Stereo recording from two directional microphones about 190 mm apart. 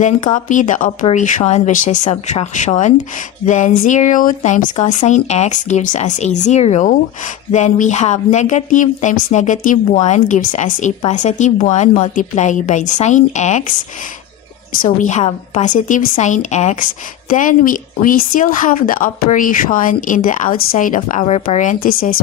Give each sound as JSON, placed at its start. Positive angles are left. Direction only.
{"t": 0.0, "sound": "speech", "side_deg": 40}
{"t": 14.8, "sound": "a woman's voice", "side_deg": 40}